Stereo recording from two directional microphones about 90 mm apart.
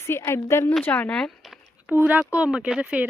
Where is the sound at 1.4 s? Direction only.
Centre (ahead or behind).